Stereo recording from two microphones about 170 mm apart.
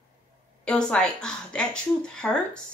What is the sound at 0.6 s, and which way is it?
A woman's voice, 5° left (ahead or behind).